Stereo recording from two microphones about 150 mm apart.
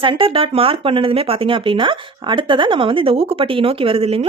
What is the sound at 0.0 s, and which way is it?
A woman's voice, 35° right (ahead or behind).